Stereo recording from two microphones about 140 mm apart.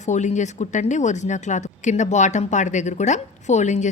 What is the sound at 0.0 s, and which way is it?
Speech, 60° left (ahead or behind).